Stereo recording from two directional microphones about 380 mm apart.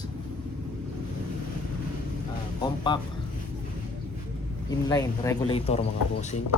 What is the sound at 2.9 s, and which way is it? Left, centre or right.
Speech, centre.